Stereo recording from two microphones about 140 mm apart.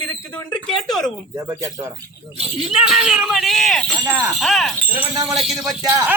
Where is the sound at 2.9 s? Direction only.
5° right (ahead or behind).